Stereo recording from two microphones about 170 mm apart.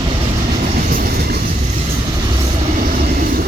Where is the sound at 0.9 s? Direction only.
60° right (ahead or behind).